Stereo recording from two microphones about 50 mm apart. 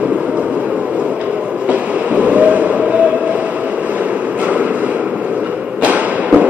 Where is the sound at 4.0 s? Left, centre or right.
Right.